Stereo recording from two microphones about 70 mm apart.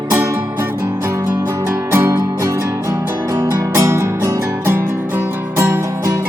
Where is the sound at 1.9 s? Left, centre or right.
Right.